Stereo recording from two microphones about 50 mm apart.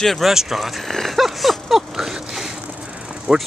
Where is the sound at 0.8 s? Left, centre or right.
Centre.